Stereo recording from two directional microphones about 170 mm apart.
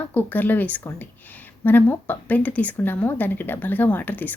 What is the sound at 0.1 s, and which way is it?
A woman's voice, 10° left (ahead or behind).